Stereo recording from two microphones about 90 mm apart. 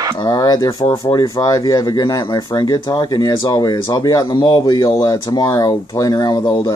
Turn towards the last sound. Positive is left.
turn(degrees=50)  # may be behind; listen again after turning